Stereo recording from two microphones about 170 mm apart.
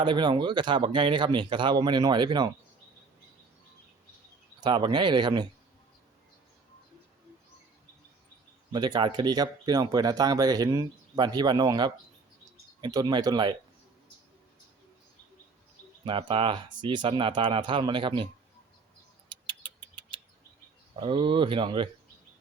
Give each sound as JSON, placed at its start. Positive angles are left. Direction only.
{"t": 0.0, "sound": "speech", "side_deg": -25}
{"t": 4.6, "sound": "speech", "side_deg": -25}
{"t": 8.7, "sound": "speech", "side_deg": -25}
{"t": 16.0, "sound": "speech", "side_deg": -30}
{"t": 19.3, "sound": "rodents", "side_deg": -25}
{"t": 20.9, "sound": "speech", "side_deg": -30}